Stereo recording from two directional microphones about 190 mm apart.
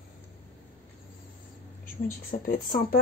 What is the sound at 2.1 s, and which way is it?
Speech, 50° left (ahead or behind).